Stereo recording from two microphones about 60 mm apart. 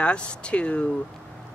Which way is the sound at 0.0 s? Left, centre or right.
Centre.